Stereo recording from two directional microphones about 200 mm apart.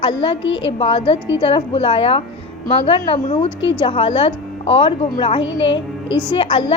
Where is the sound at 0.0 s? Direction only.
25° left (ahead or behind).